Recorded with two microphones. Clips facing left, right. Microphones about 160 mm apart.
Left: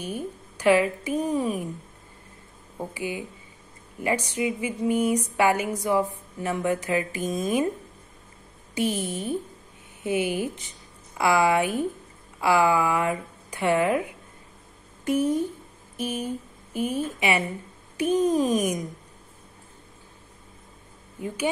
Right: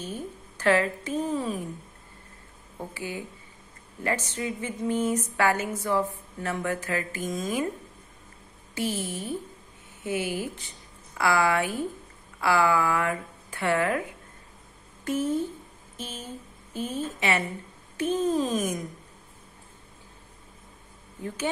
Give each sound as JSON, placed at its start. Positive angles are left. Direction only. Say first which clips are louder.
{"t": 0.0, "sound": "speech", "louder": "left 3 dB", "side_deg": 15}
{"t": 2.8, "sound": "speech", "louder": "left 4 dB", "side_deg": 15}
{"t": 8.7, "sound": "speech", "louder": "left 4 dB", "side_deg": 20}